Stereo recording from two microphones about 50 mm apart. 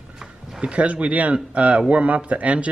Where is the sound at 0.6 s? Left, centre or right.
Right.